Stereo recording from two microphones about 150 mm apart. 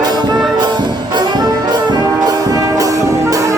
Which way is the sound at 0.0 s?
30° right (ahead or behind).